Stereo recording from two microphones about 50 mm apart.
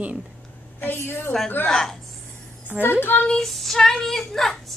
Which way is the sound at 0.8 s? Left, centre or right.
Left.